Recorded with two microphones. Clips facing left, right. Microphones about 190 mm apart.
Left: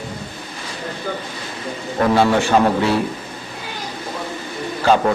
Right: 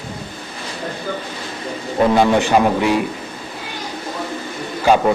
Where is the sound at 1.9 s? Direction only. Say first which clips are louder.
Right 2 dB; 15° right (ahead or behind).